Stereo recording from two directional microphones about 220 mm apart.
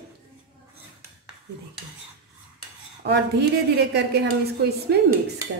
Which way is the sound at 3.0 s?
50° right (ahead or behind).